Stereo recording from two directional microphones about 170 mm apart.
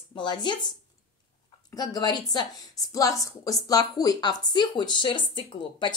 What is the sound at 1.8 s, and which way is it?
Speech, 25° left (ahead or behind).